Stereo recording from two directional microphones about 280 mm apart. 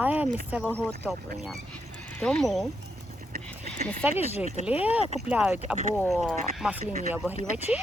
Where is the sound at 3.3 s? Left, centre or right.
Right.